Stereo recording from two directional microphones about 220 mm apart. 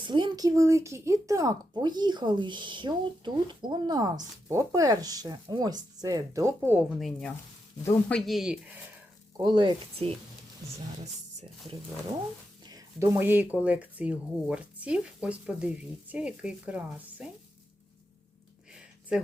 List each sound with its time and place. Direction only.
0.0 s speech: 20° right (ahead or behind); by 8.7 s centre (ahead or behind)
9.4 s speech: 20° right (ahead or behind)
12.6 s speech: 15° right (ahead or behind)
18.7 s a sound: 5° right (ahead or behind)